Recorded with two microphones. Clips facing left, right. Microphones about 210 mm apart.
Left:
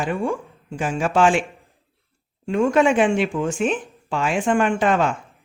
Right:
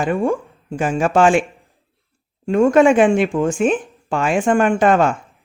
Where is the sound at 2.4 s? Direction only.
45° right (ahead or behind).